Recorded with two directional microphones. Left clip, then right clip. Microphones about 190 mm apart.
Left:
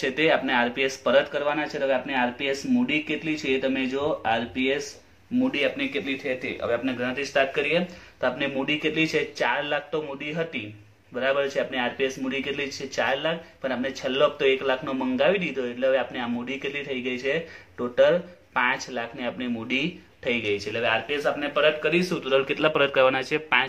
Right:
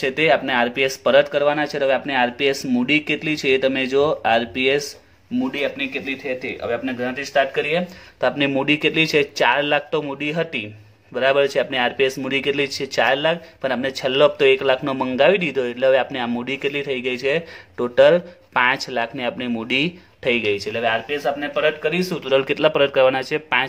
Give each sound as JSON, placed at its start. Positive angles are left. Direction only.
{"t": 0.0, "sound": "speech", "side_deg": -45}
{"t": 5.5, "sound": "speech", "side_deg": -35}